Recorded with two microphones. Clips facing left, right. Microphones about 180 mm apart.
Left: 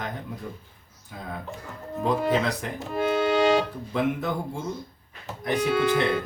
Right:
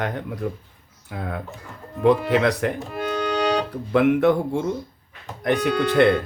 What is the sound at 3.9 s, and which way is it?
Speech, 70° right (ahead or behind).